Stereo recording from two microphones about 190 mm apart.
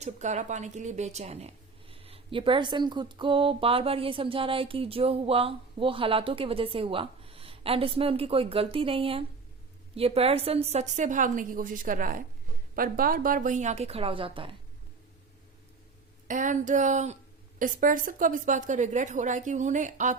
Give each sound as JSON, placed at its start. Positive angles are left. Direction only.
{"t": 0.0, "sound": "a woman's voice", "side_deg": -40}
{"t": 16.2, "sound": "a woman's voice", "side_deg": -45}